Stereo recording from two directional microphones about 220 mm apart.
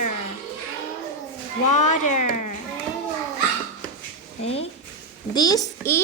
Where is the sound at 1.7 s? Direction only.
35° left (ahead or behind).